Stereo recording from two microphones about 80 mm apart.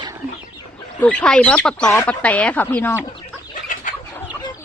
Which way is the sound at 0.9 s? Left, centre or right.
Centre.